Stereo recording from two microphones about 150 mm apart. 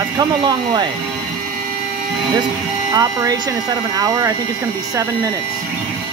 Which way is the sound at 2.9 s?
25° right (ahead or behind).